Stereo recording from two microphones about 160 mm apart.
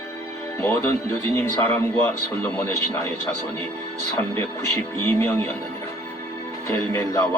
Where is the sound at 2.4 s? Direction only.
15° left (ahead or behind).